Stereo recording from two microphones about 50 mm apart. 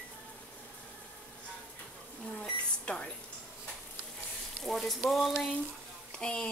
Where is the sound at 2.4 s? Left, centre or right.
Left.